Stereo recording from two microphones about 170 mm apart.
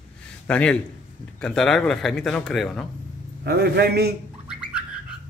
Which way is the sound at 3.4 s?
70° right (ahead or behind).